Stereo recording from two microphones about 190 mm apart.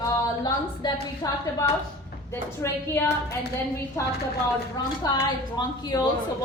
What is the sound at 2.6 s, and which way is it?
Speech, 15° left (ahead or behind).